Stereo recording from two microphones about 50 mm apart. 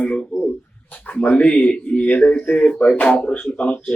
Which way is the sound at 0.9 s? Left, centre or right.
Left.